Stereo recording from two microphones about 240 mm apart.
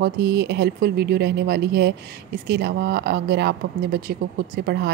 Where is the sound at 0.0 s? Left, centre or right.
Right.